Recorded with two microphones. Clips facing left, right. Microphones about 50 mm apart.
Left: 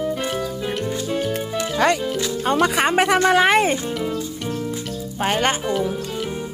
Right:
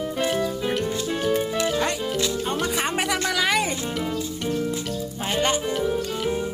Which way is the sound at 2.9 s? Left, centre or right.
Left.